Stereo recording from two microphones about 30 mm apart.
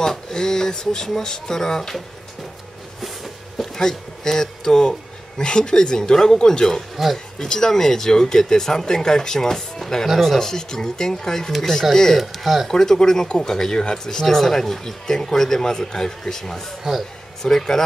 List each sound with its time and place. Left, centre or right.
0.0 s speech: centre
3.8 s speech: centre
7.0 s speech: centre
7.3 s speech: left
10.0 s speech: centre
10.4 s speech: centre
12.2 s speech: centre
12.6 s speech: centre
14.3 s speech: centre